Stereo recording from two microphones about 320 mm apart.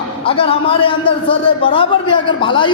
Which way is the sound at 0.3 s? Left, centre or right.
Centre.